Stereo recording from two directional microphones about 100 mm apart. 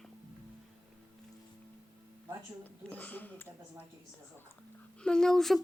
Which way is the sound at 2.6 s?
20° left (ahead or behind).